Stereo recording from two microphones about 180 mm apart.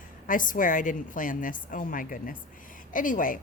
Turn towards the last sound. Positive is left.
turn(degrees=50)  # may be behind; listen again after turning